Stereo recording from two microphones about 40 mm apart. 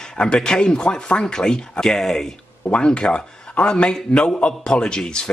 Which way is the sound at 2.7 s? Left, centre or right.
Left.